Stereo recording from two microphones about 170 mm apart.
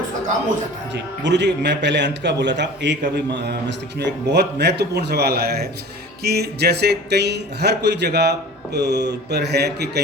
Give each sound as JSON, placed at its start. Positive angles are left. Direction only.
{"t": 0.9, "sound": "a man's voice", "side_deg": -90}
{"t": 3.2, "sound": "speech", "side_deg": -70}